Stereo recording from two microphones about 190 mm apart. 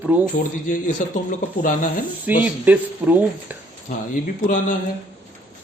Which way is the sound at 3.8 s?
40° left (ahead or behind).